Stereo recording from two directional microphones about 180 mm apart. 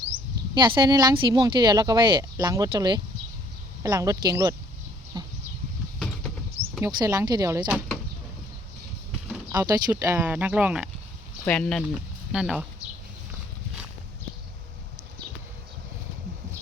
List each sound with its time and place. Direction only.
0.5 s speech: 25° right (ahead or behind)
5.1 s livestock: 20° right (ahead or behind)
6.8 s speech: 15° right (ahead or behind)
9.6 s speech: 20° right (ahead or behind)
11.4 s speech: 5° left (ahead or behind)